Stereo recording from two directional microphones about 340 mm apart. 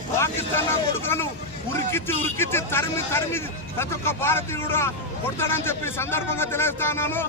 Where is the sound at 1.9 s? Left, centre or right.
Centre.